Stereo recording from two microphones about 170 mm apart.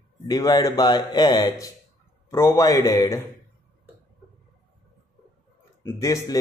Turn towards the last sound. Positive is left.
turn(degrees=20)  # may be behind; listen again after turning